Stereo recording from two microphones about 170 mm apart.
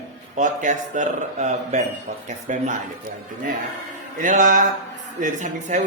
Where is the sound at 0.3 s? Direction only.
45° right (ahead or behind).